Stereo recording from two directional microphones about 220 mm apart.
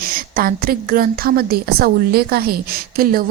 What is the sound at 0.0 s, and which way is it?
A woman's voice, 40° right (ahead or behind).